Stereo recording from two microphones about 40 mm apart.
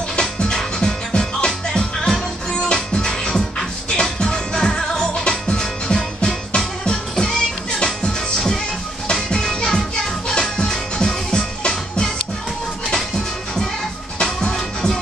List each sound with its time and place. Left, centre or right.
0.1 s music: centre
9.0 s music: centre
14.4 s music: centre